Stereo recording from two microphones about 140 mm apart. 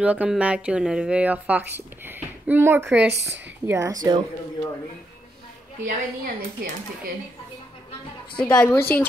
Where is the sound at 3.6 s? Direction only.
20° right (ahead or behind).